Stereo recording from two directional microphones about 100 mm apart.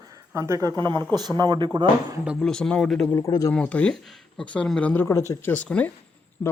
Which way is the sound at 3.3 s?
40° left (ahead or behind).